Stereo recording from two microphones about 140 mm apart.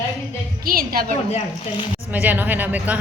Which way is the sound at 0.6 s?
90° right.